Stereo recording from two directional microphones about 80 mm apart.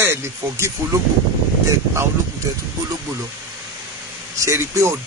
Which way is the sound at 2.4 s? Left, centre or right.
Right.